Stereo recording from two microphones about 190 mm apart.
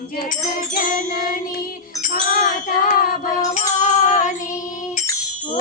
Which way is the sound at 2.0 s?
45° left (ahead or behind).